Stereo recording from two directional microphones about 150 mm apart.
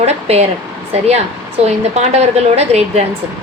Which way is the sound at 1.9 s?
45° right (ahead or behind).